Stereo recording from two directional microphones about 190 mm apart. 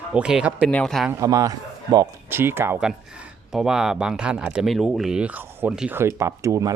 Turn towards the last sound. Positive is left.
turn(degrees=-15)  # may be behind; listen again after turning